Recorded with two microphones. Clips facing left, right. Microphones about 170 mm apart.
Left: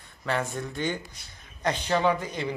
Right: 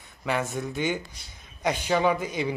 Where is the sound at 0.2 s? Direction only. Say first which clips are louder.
Right 1 dB; 5° right (ahead or behind).